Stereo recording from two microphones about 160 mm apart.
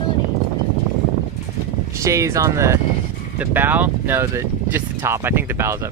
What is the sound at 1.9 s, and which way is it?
Speech, 20° right (ahead or behind).